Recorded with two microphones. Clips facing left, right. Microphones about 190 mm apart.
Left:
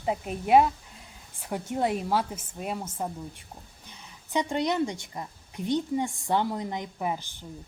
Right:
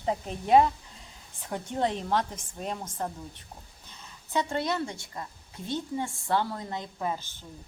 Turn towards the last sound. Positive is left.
turn(degrees=15)  # may be behind; listen again after turning